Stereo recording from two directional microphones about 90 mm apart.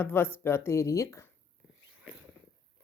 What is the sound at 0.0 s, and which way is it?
Speech, 25° left (ahead or behind).